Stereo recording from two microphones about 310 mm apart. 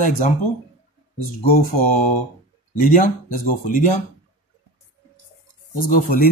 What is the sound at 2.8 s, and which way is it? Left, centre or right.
Speech, left.